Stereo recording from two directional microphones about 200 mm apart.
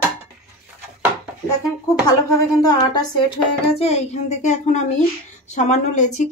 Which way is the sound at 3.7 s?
35° left (ahead or behind).